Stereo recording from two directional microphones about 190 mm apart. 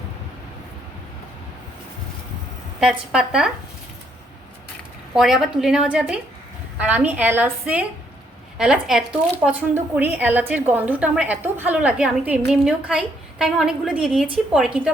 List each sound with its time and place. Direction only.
2.8 s a woman's voice: 5° right (ahead or behind)
5.1 s a woman's voice: centre (ahead or behind)